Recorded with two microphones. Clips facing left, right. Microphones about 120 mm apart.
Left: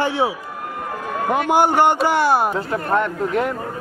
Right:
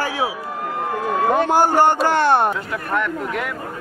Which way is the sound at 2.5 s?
35° left (ahead or behind).